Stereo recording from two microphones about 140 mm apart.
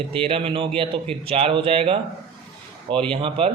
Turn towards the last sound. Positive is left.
turn(degrees=-45)  # may be behind; listen again after turning